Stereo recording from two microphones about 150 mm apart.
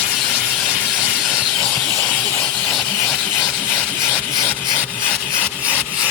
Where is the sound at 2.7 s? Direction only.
Centre (ahead or behind).